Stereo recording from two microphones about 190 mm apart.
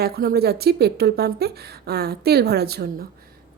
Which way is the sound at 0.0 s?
55° right (ahead or behind).